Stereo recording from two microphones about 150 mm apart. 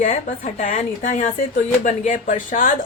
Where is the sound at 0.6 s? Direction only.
60° left (ahead or behind).